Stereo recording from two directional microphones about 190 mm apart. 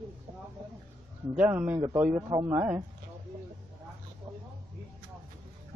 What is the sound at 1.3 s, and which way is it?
A man's voice, 10° right (ahead or behind).